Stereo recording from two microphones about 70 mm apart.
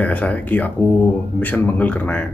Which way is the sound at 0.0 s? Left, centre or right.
Left.